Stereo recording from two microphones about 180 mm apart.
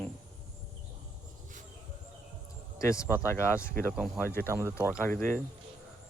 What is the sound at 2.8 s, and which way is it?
Speech, 15° left (ahead or behind).